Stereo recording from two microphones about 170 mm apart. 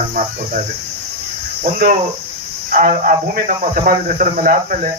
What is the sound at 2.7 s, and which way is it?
Speech, 50° right (ahead or behind).